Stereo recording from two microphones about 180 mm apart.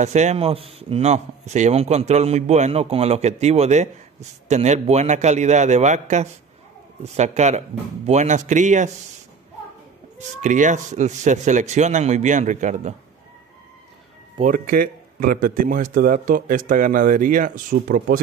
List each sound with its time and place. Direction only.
0.0 s speech: 40° right (ahead or behind)
10.1 s speech: 45° right (ahead or behind)
14.4 s speech: 50° right (ahead or behind)